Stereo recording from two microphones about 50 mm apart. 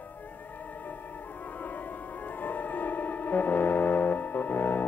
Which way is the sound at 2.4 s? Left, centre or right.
Left.